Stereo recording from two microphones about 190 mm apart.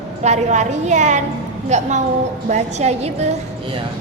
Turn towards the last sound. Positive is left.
turn(degrees=-35)  # may be behind; listen again after turning